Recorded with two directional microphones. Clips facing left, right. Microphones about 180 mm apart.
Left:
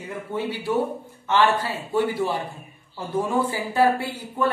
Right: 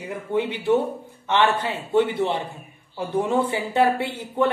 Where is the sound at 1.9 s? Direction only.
20° right (ahead or behind).